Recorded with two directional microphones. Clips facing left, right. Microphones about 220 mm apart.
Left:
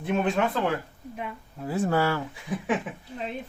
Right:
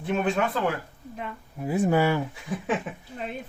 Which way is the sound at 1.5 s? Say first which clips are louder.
Right 2 dB; 15° right (ahead or behind).